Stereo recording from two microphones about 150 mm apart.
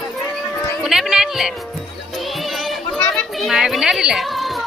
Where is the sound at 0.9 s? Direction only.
5° right (ahead or behind).